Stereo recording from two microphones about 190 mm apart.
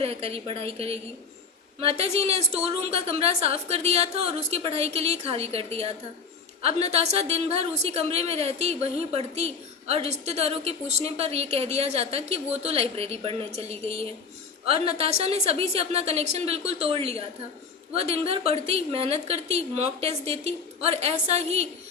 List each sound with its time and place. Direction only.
0.0 s a woman's voice: 30° right (ahead or behind)